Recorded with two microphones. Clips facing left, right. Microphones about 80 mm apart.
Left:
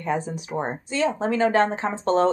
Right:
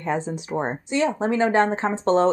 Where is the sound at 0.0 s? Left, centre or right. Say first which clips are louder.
Right 1 dB; right.